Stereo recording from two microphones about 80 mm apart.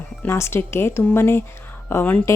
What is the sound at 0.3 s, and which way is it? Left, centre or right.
A woman's voice, left.